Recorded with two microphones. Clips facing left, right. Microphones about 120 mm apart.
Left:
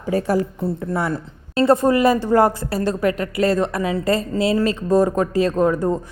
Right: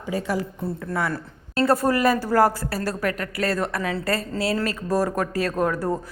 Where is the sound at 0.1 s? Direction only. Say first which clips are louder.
Left 6 dB; 45° left (ahead or behind).